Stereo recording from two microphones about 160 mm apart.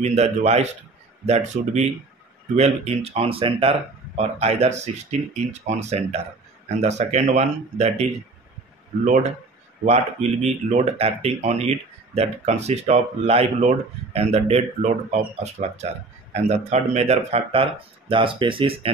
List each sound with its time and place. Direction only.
0.0 s speech: 45° right (ahead or behind)
9.8 s speech: 45° right (ahead or behind)